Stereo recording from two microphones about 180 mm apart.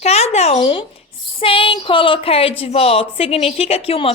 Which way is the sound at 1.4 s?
30° left (ahead or behind).